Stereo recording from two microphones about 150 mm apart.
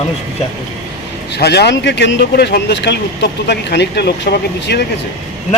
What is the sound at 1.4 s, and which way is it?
Speech, 90° left.